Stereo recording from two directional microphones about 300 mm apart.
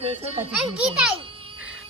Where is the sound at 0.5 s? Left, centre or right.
Centre.